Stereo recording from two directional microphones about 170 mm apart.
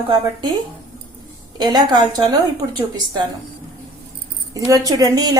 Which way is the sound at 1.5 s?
25° right (ahead or behind).